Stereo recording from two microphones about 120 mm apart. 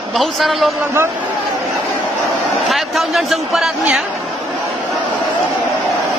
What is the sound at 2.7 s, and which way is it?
A man's voice, centre (ahead or behind).